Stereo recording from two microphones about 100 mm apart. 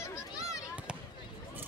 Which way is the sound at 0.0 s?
35° left (ahead or behind).